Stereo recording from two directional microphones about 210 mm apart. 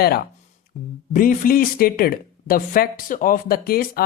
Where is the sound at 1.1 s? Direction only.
40° left (ahead or behind).